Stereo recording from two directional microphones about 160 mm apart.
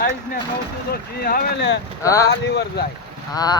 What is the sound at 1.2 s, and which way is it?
Speech, 80° left.